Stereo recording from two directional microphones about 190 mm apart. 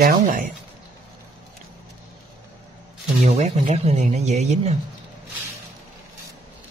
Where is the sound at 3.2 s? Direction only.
40° right (ahead or behind).